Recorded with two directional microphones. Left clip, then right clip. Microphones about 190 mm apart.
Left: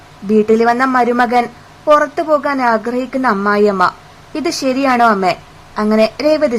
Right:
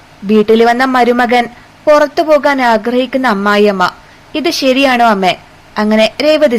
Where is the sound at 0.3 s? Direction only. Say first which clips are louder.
Right 3 dB; 15° right (ahead or behind).